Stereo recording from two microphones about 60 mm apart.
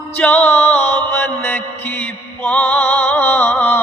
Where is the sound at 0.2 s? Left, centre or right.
Left.